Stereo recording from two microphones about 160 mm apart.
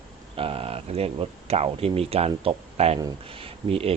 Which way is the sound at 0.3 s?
35° right (ahead or behind).